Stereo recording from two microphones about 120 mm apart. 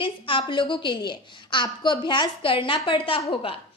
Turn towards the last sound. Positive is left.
turn(degrees=45)  # may be behind; listen again after turning